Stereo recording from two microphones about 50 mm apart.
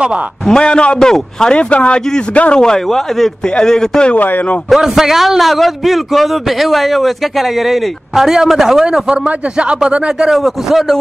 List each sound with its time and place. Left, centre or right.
0.5 s a man's voice: centre
1.6 s speech: left
2.6 s a man's voice: centre
4.1 s speech: left
4.6 s a man's voice: centre
8.8 s speech: centre
10.3 s a man's voice: centre